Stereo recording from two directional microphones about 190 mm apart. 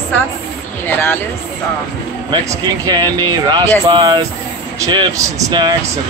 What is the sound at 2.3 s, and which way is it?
Speech, 20° right (ahead or behind).